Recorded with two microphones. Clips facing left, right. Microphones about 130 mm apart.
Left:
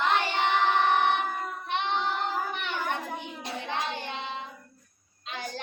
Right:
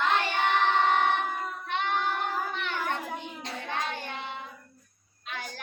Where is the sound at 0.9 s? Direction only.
15° left (ahead or behind).